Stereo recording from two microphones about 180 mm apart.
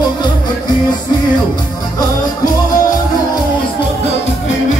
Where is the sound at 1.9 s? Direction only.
20° left (ahead or behind).